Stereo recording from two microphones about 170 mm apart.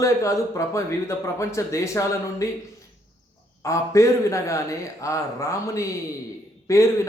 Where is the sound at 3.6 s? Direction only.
15° left (ahead or behind).